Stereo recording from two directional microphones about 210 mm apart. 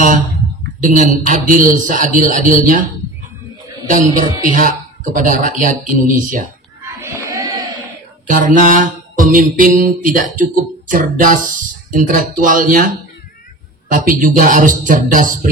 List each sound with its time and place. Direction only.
0.8 s mantra: 40° right (ahead or behind)
3.9 s mantra: 40° right (ahead or behind)
7.0 s a sound: 15° right (ahead or behind)
8.3 s mantra: 40° right (ahead or behind)